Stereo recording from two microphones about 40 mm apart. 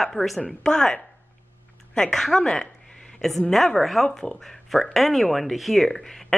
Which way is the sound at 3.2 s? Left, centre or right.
Centre.